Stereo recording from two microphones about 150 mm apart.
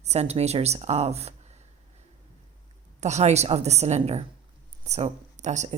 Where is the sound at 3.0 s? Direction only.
50° right (ahead or behind).